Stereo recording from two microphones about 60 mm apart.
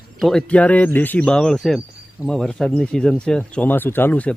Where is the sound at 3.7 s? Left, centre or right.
Left.